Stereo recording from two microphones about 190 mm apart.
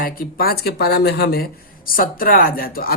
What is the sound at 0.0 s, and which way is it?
Speech, 50° left (ahead or behind).